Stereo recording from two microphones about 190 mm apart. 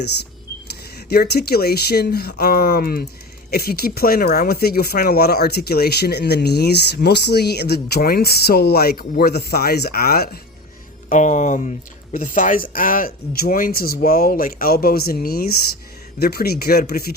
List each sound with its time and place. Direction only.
0.9 s speech: 55° left (ahead or behind)
11.1 s speech: 40° left (ahead or behind)